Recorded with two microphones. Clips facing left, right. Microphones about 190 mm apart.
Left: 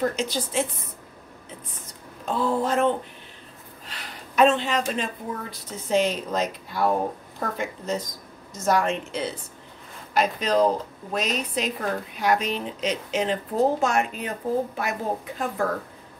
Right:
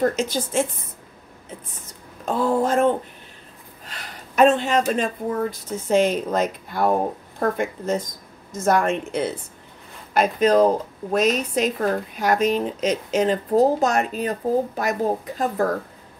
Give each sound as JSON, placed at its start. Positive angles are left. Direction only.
{"t": 0.0, "sound": "speech", "side_deg": -45}
{"t": 2.2, "sound": "speech", "side_deg": -45}
{"t": 3.9, "sound": "a woman's voice", "side_deg": -45}